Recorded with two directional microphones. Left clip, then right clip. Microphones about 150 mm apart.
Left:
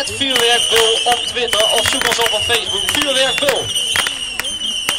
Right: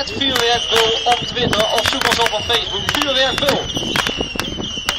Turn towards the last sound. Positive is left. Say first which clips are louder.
# left 1 dB
turn(degrees=25)  # may be behind; listen again after turning